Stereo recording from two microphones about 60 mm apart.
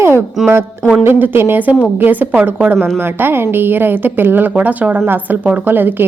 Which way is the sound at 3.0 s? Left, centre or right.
Right.